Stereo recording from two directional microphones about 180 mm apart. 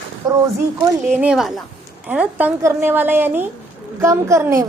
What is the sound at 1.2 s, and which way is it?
A woman's voice, 5° right (ahead or behind).